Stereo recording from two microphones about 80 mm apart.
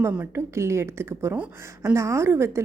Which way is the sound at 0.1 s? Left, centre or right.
Right.